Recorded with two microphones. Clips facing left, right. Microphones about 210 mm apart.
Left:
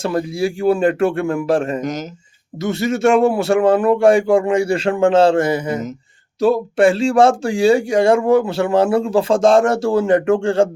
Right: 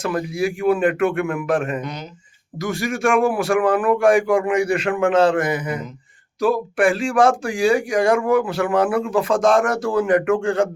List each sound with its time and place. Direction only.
0.0 s speech: 30° left (ahead or behind)
1.8 s speech: 45° left (ahead or behind)
2.6 s speech: 25° left (ahead or behind)